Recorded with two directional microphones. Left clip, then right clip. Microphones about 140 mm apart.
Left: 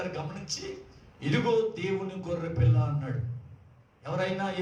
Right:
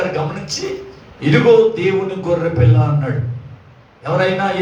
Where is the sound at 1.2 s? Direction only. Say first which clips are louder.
Right 16 dB; 45° left (ahead or behind).